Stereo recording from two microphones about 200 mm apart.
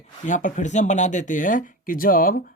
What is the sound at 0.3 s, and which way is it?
Speech, 40° left (ahead or behind).